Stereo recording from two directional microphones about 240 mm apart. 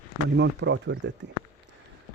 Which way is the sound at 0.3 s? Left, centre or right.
Right.